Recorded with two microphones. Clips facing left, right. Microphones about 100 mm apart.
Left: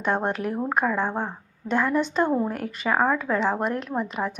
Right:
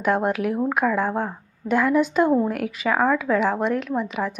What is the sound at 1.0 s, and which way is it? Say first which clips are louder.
Speech: right 3 dB; 20° left (ahead or behind).